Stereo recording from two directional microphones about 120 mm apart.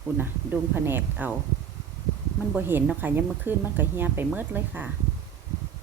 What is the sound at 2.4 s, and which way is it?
A woman's voice, 15° right (ahead or behind).